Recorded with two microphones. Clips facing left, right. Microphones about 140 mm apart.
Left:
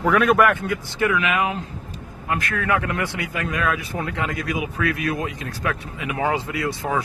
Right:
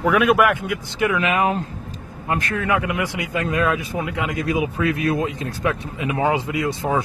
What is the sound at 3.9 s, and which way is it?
Speech, 15° right (ahead or behind).